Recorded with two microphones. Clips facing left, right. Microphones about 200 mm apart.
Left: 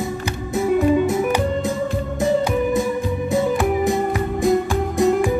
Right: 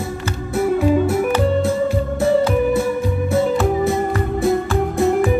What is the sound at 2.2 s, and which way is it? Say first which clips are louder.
Music: right 2 dB; 15° left (ahead or behind).